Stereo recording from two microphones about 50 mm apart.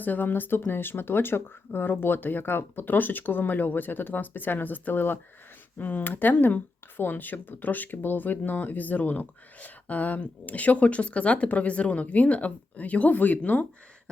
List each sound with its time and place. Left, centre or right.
0.0 s speech: left